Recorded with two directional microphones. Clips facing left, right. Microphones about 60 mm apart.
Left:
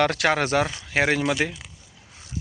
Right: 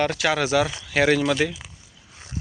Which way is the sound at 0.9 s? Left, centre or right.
Left.